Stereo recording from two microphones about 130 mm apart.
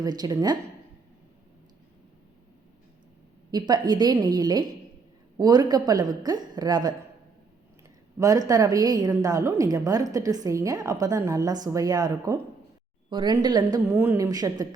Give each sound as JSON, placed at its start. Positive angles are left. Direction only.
{"t": 0.0, "sound": "a woman's voice", "side_deg": -30}
{"t": 3.5, "sound": "a woman's voice", "side_deg": -35}
{"t": 8.2, "sound": "a woman's voice", "side_deg": -25}
{"t": 13.9, "sound": "a woman's voice", "side_deg": -20}